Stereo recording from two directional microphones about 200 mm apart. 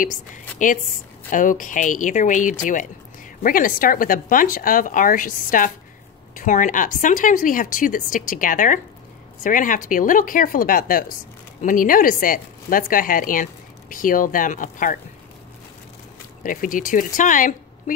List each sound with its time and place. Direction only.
1.3 s a woman's voice: 40° left (ahead or behind)
16.4 s a woman's voice: 40° left (ahead or behind)